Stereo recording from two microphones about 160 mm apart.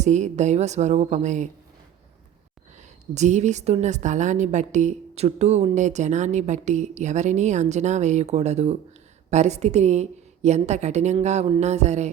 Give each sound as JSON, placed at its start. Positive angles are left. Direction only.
{"t": 0.0, "sound": "a woman's voice", "side_deg": -45}
{"t": 2.7, "sound": "a woman's voice", "side_deg": -45}